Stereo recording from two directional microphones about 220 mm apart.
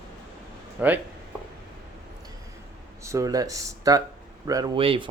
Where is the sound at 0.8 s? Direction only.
10° right (ahead or behind).